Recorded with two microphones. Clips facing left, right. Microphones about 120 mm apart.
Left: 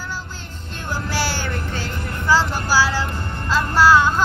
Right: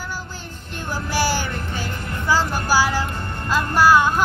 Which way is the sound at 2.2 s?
15° right (ahead or behind).